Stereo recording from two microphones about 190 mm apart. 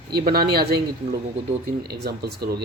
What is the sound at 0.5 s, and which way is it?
Speech, 55° right (ahead or behind).